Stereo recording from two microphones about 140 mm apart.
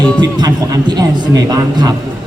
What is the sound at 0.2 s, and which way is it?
A man's voice, 30° right (ahead or behind).